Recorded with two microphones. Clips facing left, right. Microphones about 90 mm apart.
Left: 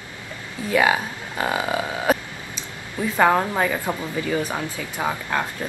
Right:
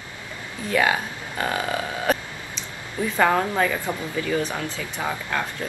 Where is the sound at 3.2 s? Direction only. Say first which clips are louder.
Left 2 dB; 15° left (ahead or behind).